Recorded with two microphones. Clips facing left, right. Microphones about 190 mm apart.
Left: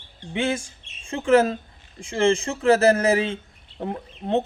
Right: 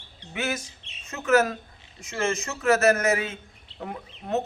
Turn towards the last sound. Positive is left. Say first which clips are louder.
# left 4 dB
turn(degrees=30)  # may be behind; listen again after turning